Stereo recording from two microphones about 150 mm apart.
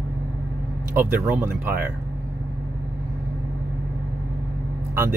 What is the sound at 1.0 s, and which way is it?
Speech, 10° right (ahead or behind).